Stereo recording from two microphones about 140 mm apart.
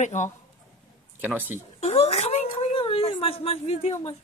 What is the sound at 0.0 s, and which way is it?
Speech, 60° left (ahead or behind).